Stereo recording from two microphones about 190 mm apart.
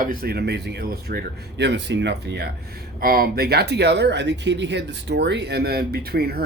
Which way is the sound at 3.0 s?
50° right (ahead or behind).